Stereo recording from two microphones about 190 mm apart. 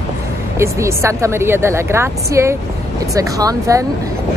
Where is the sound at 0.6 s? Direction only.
15° right (ahead or behind).